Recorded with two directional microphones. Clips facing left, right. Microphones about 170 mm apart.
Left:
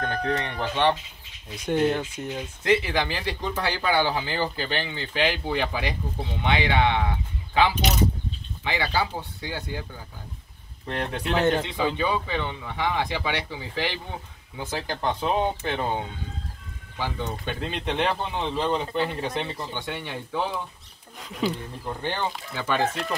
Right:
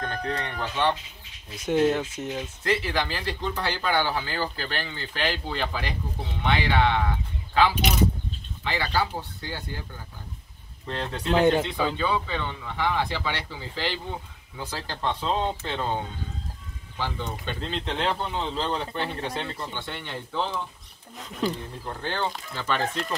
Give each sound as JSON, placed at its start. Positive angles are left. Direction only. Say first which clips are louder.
{"t": 0.0, "sound": "speech", "louder": "left 3 dB", "side_deg": 20}
{"t": 1.7, "sound": "speech", "louder": "right 1 dB", "side_deg": -5}
{"t": 2.6, "sound": "speech", "louder": "left 4 dB", "side_deg": 15}
{"t": 10.9, "sound": "speech", "louder": "left 2 dB", "side_deg": 15}
{"t": 11.2, "sound": "speech", "louder": "right 3 dB", "side_deg": -10}
{"t": 11.6, "sound": "speech", "louder": "left 1 dB", "side_deg": 15}
{"t": 17.0, "sound": "speech", "louder": "left 1 dB", "side_deg": 10}